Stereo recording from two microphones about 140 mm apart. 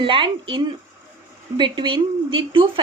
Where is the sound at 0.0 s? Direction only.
35° right (ahead or behind).